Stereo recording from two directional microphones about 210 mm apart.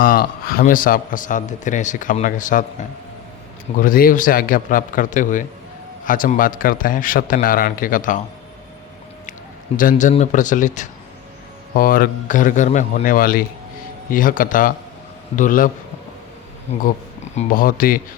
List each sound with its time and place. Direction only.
0.0 s a man's voice: 45° left (ahead or behind)
3.8 s a man's voice: 40° left (ahead or behind)
9.7 s a man's voice: 40° left (ahead or behind)
17.3 s speech: 40° left (ahead or behind)